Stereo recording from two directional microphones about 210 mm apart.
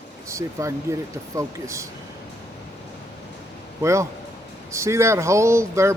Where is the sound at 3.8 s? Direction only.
15° right (ahead or behind).